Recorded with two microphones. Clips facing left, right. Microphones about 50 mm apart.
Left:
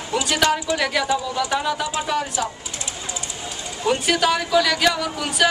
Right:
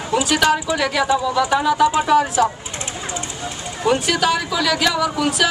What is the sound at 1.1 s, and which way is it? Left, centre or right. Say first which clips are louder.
Speech: right 5 dB; centre.